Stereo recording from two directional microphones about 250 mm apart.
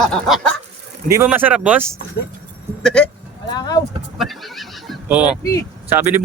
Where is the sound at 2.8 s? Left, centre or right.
Centre.